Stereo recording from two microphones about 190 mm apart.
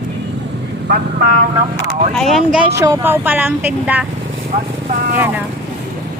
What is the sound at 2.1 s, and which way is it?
Speech, centre (ahead or behind).